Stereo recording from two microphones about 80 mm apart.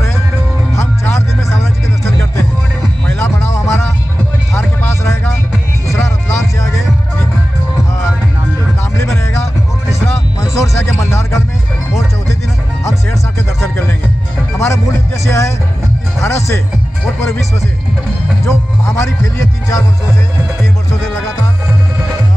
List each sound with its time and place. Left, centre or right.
0.7 s music: left
4.6 s a sound: left
5.9 s music: left
9.0 s music: left
14.6 s music: left
18.4 s music: left